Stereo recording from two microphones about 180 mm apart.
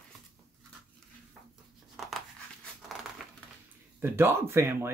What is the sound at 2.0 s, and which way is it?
Crumpling, centre (ahead or behind).